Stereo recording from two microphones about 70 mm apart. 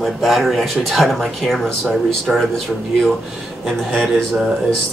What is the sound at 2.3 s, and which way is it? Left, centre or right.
Speech, centre.